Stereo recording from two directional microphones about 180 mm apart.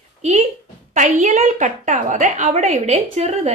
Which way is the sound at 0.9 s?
45° right (ahead or behind).